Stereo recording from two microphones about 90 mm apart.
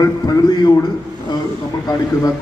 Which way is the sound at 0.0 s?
45° left (ahead or behind).